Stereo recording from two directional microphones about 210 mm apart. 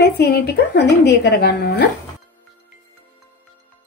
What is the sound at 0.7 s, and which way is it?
A woman's voice, 55° left (ahead or behind).